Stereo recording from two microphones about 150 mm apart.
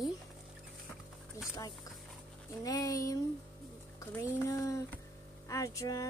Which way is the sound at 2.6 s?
25° left (ahead or behind).